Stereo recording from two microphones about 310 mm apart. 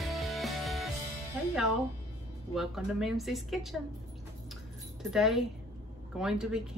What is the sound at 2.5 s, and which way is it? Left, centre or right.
A woman's voice, centre.